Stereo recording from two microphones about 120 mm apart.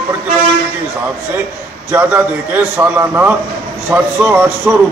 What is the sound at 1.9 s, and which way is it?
A man's voice, 15° right (ahead or behind).